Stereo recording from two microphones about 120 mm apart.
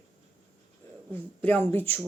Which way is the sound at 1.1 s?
15° left (ahead or behind).